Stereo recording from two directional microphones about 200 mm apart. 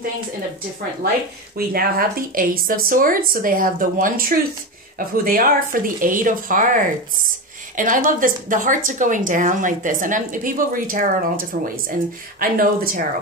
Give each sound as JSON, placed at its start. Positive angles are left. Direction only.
{"t": 1.7, "sound": "a woman's voice", "side_deg": -50}